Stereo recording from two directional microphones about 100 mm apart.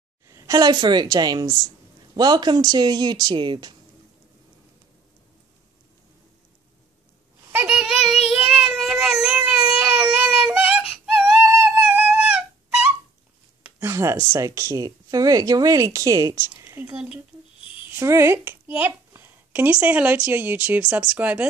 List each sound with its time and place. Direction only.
0.3 s a woman's voice: 35° right (ahead or behind); by 3.7 s 50° right (ahead or behind)
7.5 s a sound: 10° right (ahead or behind)
8.4 s baby cry: 5° right (ahead or behind)
11.4 s music: 15° right (ahead or behind)
13.7 s a sound: 30° right (ahead or behind)
14.3 s speech: 30° right (ahead or behind)
16.9 s speech: 10° right (ahead or behind)
17.9 s speech: 25° right (ahead or behind)